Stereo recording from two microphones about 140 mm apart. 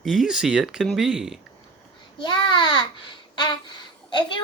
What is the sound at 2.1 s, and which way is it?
A child's voice, 30° left (ahead or behind).